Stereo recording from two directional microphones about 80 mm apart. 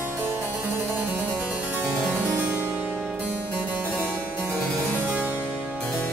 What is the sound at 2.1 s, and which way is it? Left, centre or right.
Harpsichord, right.